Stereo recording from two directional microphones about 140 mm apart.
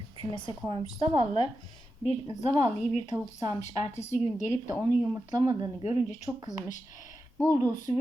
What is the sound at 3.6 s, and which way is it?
Speech, 50° left (ahead or behind).